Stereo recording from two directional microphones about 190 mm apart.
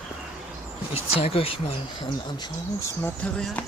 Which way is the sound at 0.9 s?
30° left (ahead or behind).